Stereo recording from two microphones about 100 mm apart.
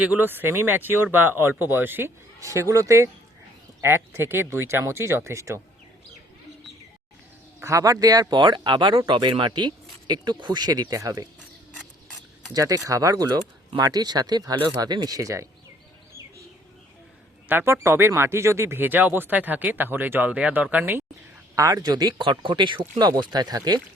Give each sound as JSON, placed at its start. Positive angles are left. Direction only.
{"t": 0.0, "sound": "speech", "side_deg": -15}
{"t": 7.6, "sound": "speech", "side_deg": -35}
{"t": 12.5, "sound": "speech", "side_deg": -35}
{"t": 17.5, "sound": "speech", "side_deg": -25}
{"t": 21.5, "sound": "speech", "side_deg": -35}